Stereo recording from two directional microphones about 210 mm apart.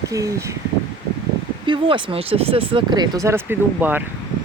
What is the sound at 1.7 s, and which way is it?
Speech, 25° right (ahead or behind).